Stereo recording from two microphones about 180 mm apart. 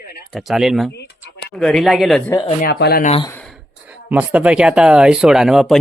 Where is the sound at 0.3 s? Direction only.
Centre (ahead or behind).